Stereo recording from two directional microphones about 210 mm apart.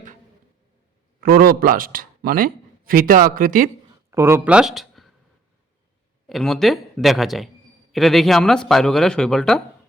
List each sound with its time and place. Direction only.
1.2 s speech: 45° right (ahead or behind)
4.1 s speech: 10° right (ahead or behind)
6.2 s speech: centre (ahead or behind)